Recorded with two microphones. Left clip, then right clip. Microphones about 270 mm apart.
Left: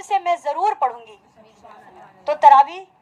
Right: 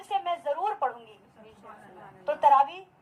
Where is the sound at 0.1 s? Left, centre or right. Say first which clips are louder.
Left 9 dB; left.